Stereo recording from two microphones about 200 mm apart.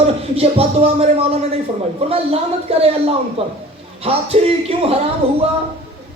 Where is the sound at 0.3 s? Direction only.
30° right (ahead or behind).